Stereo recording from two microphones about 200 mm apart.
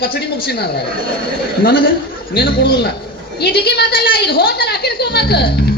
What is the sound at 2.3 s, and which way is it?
A woman's voice, 50° left (ahead or behind).